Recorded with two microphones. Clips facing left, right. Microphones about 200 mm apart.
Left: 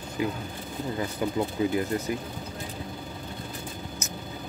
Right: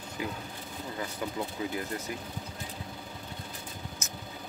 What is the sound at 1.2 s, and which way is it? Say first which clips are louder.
Speech: left 7 dB; 15° left (ahead or behind).